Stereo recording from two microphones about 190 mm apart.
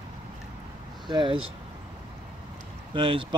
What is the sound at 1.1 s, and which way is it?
Speech, 25° right (ahead or behind).